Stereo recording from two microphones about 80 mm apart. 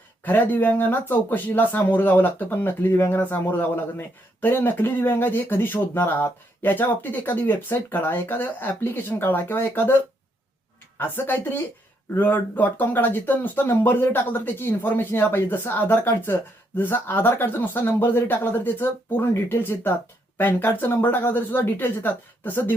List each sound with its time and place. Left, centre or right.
0.3 s speech: left